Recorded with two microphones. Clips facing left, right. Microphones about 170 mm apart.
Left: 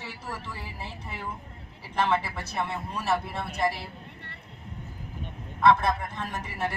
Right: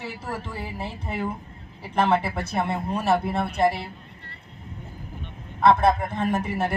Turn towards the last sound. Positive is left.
turn(degrees=-55)  # may be behind; listen again after turning